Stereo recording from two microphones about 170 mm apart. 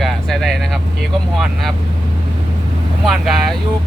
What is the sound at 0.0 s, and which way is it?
Vehicle, centre (ahead or behind).